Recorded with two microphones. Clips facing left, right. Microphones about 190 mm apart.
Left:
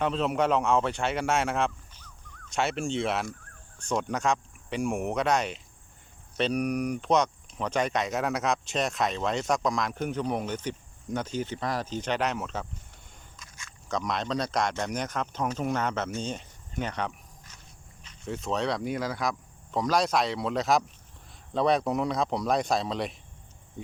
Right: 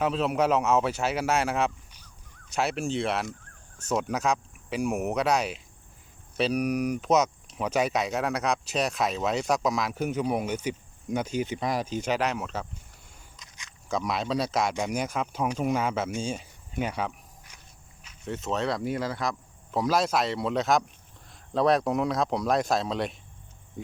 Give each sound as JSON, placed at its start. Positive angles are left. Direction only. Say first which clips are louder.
{"t": 0.0, "sound": "speech", "louder": "right 1 dB", "side_deg": 0}
{"t": 13.4, "sound": "a sound", "louder": "left 1 dB", "side_deg": -20}
{"t": 13.9, "sound": "speech", "louder": "right 2 dB", "side_deg": -5}